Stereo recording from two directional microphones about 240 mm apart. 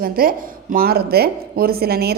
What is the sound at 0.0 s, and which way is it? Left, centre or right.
Speech, right.